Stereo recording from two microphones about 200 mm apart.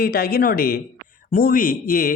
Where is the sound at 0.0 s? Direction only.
50° left (ahead or behind).